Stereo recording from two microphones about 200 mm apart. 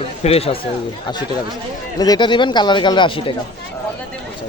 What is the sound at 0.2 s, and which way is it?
Speech, 30° left (ahead or behind).